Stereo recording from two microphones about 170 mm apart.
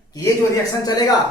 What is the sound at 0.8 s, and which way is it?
Speech, 20° left (ahead or behind).